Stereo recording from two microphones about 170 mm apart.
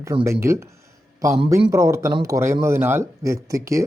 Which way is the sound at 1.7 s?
15° right (ahead or behind).